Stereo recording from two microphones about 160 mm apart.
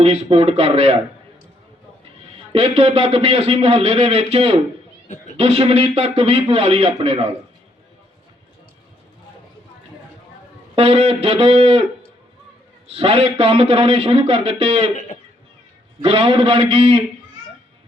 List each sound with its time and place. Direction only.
0.0 s speech: 40° right (ahead or behind)
2.5 s speech: 35° right (ahead or behind)
10.8 s speech: 35° right (ahead or behind)
12.9 s speech: 35° right (ahead or behind)
14.9 s guitar: 50° left (ahead or behind)
16.0 s speech: 35° right (ahead or behind)